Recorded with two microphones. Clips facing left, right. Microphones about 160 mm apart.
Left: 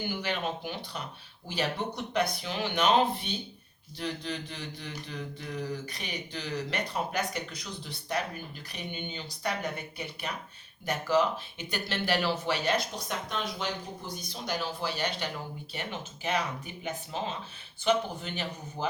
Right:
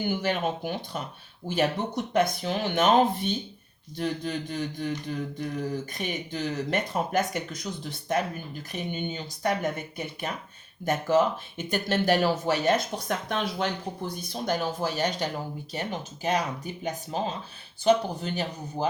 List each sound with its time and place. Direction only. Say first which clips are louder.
0.1 s speech: right 6 dB; 50° right (ahead or behind)